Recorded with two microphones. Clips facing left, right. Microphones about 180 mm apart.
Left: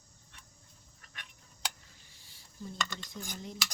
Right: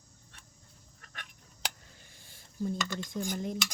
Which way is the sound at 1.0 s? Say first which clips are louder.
Right 4 dB; 50° right (ahead or behind).